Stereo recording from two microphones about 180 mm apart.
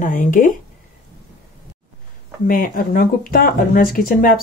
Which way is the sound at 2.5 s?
50° left (ahead or behind).